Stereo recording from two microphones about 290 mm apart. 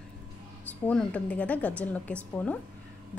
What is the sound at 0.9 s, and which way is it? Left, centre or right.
A woman's voice, centre.